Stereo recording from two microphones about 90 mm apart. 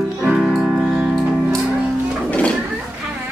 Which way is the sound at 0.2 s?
5° right (ahead or behind).